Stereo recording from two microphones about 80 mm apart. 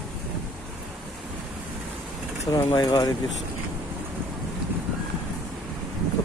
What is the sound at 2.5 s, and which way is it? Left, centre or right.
Speech, left.